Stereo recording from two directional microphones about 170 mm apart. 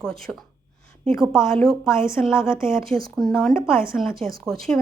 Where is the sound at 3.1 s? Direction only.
5° left (ahead or behind).